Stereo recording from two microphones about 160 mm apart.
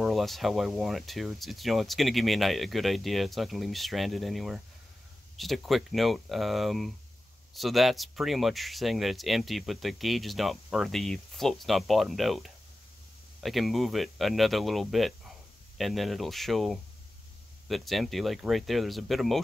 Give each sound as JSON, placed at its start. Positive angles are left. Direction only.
{"t": 0.0, "sound": "speech", "side_deg": 0}